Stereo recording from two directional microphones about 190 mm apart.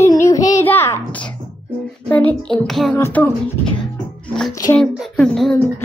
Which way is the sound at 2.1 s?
5° left (ahead or behind).